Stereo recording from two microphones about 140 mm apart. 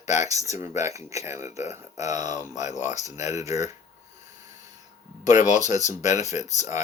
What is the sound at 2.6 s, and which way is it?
Speech, 55° left (ahead or behind).